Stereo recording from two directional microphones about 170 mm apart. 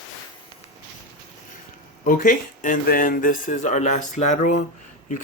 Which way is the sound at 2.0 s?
55° left (ahead or behind).